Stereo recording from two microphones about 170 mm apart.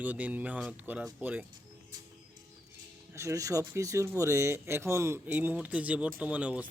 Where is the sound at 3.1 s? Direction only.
15° right (ahead or behind).